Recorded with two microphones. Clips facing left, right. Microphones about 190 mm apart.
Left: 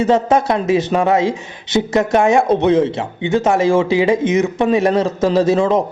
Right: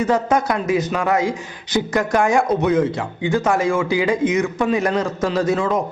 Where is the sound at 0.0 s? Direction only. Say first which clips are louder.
Left 4 dB; 25° left (ahead or behind).